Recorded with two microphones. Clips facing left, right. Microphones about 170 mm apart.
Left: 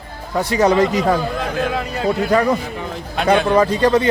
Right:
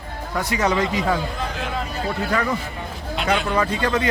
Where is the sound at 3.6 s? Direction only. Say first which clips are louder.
Left 7 dB; 35° left (ahead or behind).